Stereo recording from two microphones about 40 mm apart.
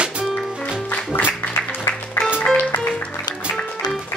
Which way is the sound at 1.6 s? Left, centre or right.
Left.